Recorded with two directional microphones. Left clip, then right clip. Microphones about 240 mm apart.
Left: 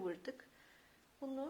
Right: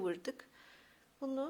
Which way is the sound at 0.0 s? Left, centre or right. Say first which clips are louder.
Right 5 dB; right.